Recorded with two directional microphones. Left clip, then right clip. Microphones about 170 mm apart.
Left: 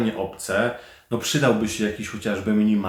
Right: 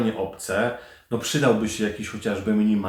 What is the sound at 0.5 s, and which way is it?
Speech, 20° left (ahead or behind).